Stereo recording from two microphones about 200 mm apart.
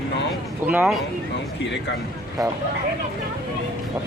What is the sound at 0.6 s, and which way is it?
Speech, 10° right (ahead or behind).